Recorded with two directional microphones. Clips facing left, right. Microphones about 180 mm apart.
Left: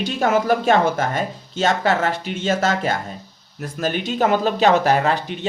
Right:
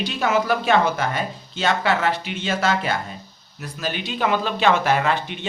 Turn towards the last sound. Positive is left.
turn(degrees=40)  # may be behind; listen again after turning